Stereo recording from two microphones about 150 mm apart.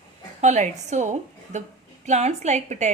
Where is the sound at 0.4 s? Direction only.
50° right (ahead or behind).